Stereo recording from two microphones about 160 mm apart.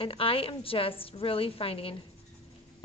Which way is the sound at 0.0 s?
35° left (ahead or behind).